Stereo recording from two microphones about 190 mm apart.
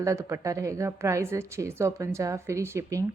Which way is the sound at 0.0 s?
15° right (ahead or behind).